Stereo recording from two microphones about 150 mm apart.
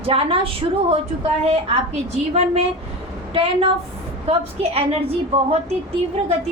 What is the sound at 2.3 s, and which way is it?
A woman's voice, 45° right (ahead or behind).